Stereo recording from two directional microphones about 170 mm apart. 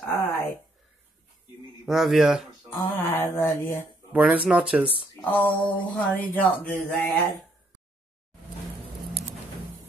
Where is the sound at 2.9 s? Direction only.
15° left (ahead or behind).